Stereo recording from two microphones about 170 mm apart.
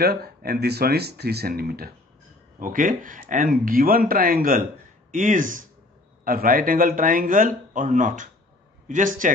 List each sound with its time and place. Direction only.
0.0 s speech: 65° right (ahead or behind)
2.6 s speech: 55° right (ahead or behind)